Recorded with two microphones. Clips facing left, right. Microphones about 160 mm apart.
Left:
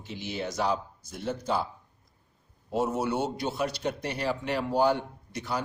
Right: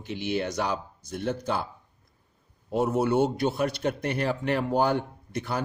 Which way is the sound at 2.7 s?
55° right (ahead or behind).